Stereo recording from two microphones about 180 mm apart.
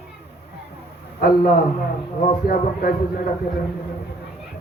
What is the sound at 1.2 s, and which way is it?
Speech, 55° left (ahead or behind).